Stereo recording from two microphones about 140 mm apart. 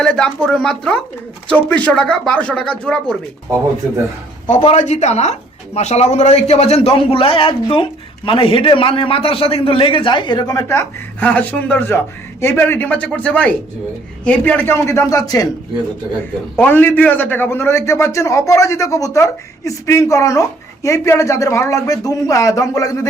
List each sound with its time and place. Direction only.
0.0 s speech: 5° left (ahead or behind)
4.7 s a man's voice: 55° left (ahead or behind); by 15.4 s 25° left (ahead or behind)
16.6 s a man's voice: 15° left (ahead or behind)